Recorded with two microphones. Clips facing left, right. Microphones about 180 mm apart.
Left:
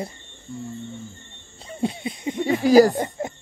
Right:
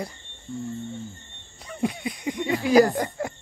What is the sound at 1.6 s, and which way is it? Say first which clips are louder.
Speech: left 1 dB; 25° left (ahead or behind).